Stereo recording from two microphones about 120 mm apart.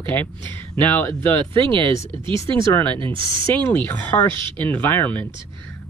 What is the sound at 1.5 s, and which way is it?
Speech, 45° right (ahead or behind).